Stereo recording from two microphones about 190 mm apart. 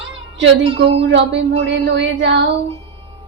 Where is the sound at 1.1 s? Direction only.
70° right (ahead or behind).